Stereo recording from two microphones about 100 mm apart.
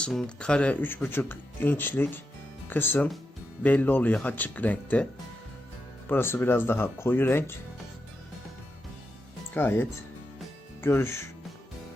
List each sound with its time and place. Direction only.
0.0 s speech: 10° left (ahead or behind)
6.1 s speech: 25° left (ahead or behind)
9.6 s speech: 20° left (ahead or behind)